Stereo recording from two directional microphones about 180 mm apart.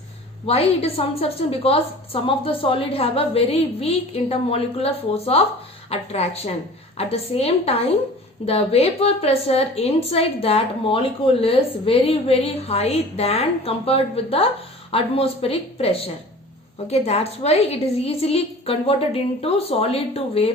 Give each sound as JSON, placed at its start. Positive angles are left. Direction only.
{"t": 0.4, "sound": "a woman's voice", "side_deg": 35}